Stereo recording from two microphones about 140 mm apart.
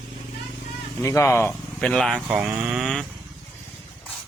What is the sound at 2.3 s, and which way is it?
Speech, 10° right (ahead or behind).